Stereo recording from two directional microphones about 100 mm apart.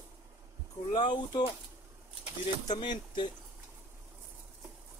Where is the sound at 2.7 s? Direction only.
50° left (ahead or behind).